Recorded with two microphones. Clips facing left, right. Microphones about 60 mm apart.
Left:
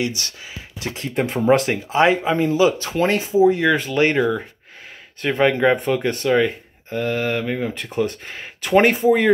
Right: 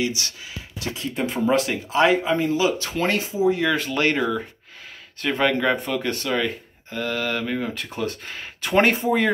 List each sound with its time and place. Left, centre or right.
0.0 s speech: left
1.9 s speech: left
2.5 s speech: left
3.5 s speech: centre
5.4 s speech: centre
5.8 s speech: centre